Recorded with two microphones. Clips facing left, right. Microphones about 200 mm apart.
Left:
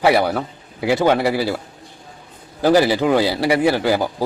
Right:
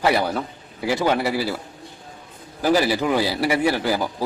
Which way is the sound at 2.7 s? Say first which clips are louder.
Left 4 dB; 20° left (ahead or behind).